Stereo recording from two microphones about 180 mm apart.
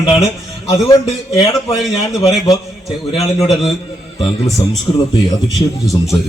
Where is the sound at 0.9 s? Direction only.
20° left (ahead or behind).